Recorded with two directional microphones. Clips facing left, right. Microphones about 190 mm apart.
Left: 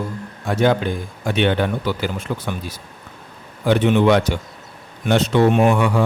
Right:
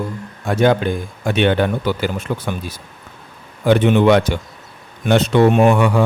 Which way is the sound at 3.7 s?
60° right (ahead or behind).